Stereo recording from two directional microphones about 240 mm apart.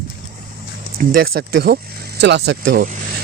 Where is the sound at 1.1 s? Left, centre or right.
Right.